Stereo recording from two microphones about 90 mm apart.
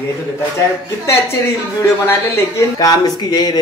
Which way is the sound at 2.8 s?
45° left (ahead or behind).